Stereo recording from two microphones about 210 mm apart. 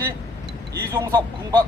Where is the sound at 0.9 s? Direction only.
20° right (ahead or behind).